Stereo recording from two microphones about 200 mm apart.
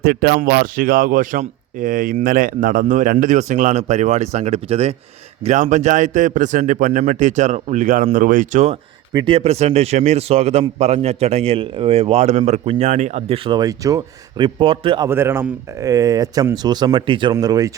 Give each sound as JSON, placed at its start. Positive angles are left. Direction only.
{"t": 0.0, "sound": "a man's voice", "side_deg": -50}
{"t": 15.1, "sound": "speech", "side_deg": -10}